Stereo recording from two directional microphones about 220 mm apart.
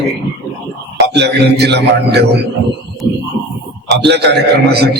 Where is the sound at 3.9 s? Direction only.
50° right (ahead or behind).